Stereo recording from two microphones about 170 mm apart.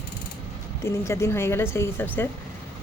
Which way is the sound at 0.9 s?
15° left (ahead or behind).